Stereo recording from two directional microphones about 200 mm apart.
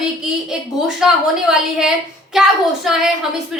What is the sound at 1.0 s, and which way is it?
A woman's voice, 5° right (ahead or behind).